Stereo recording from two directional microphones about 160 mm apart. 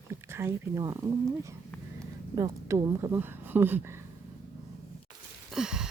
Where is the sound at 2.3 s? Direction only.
20° right (ahead or behind).